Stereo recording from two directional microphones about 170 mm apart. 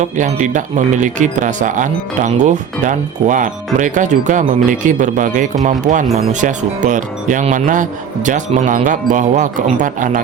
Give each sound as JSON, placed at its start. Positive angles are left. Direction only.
{"t": 0.0, "sound": "speech", "side_deg": -45}